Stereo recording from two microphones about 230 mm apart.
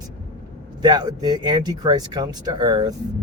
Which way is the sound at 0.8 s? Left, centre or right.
Centre.